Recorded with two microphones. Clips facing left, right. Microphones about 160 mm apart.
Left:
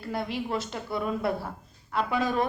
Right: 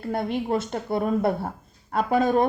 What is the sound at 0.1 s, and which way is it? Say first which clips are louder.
Speech: right 5 dB; 50° right (ahead or behind).